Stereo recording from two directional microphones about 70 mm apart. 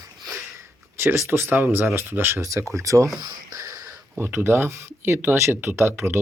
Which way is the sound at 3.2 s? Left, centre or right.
Right.